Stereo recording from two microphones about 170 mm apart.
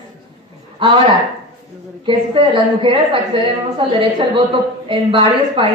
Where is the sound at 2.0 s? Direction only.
30° right (ahead or behind).